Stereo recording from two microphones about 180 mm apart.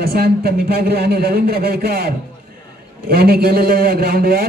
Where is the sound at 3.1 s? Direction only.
60° right (ahead or behind).